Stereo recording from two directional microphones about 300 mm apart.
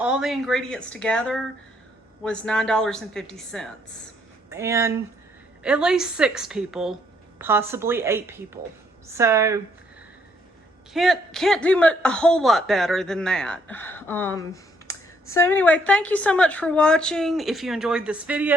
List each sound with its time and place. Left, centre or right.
0.0 s a man's voice: centre
4.4 s a woman's voice: centre
10.9 s a man's voice: centre